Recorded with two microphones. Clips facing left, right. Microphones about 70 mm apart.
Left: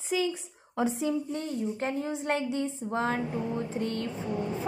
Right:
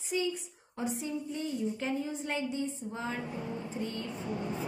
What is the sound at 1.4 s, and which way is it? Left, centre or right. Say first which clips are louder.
A woman's voice: left 2 dB; left.